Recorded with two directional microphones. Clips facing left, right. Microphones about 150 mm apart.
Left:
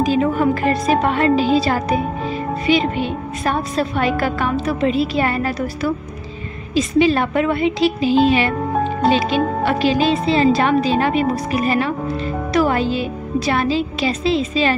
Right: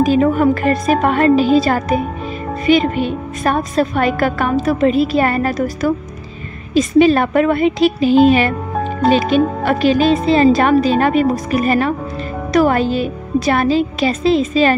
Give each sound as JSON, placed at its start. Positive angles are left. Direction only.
{"t": 0.0, "sound": "a woman's voice", "side_deg": -50}